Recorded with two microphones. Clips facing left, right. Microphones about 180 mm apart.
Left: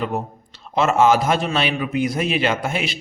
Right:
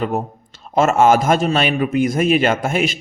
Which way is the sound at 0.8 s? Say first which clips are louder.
Right 3 dB; 50° right (ahead or behind).